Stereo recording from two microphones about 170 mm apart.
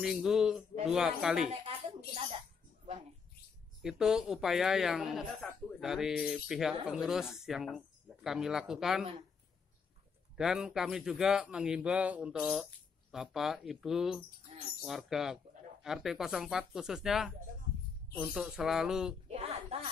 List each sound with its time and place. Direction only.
0.0 s speech: 5° right (ahead or behind)
1.5 s a sound: 35° right (ahead or behind)
3.8 s speech: 5° right (ahead or behind)
10.3 s speech: 5° right (ahead or behind)
14.5 s bird: 35° right (ahead or behind)
14.9 s speech: centre (ahead or behind)
19.2 s a sound: 40° right (ahead or behind)